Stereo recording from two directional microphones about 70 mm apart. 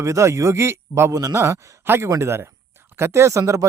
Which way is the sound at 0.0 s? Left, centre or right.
Right.